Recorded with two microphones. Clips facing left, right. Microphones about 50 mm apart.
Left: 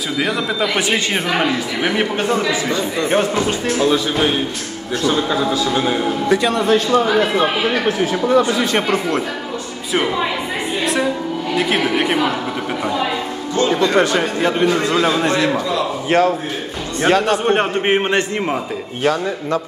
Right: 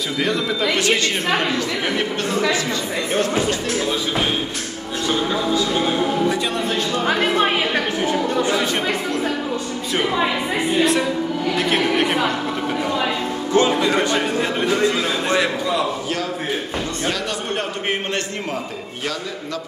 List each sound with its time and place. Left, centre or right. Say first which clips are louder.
0.6 s a man's voice: even; centre
6.3 s speech: left 7 dB; left
11.5 s a woman's voice: left 3 dB; centre
13.5 s speech: right 2 dB; right
13.9 s a man's voice: left 3 dB; left
16.1 s a man's voice: left 8 dB; left